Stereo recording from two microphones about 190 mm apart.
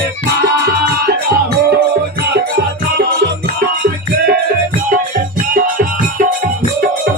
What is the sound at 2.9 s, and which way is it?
Music, 55° right (ahead or behind).